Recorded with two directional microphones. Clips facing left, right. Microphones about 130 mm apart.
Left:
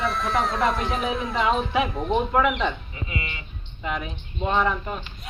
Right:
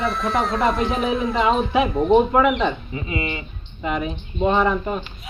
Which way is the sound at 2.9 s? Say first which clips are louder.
Right 7 dB; 30° right (ahead or behind).